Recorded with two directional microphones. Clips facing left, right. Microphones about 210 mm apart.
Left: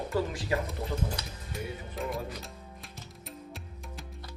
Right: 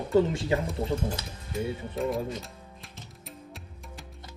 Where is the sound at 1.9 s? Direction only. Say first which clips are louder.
Right 6 dB; centre (ahead or behind).